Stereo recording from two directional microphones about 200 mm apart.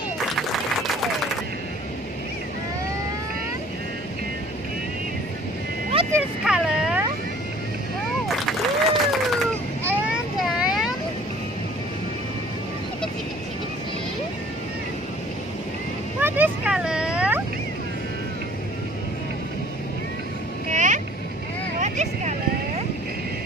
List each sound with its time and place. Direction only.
0.7 s applause: centre (ahead or behind)
6.4 s a sound: 5° right (ahead or behind)
8.5 s applause: centre (ahead or behind)
9.8 s vehicle: 5° right (ahead or behind)
16.2 s vehicle: 10° right (ahead or behind)
20.7 s boat: 40° right (ahead or behind)
21.7 s vehicle: 35° right (ahead or behind)